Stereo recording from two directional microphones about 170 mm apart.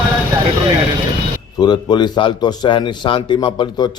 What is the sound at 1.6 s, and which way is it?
A man's voice, 25° left (ahead or behind).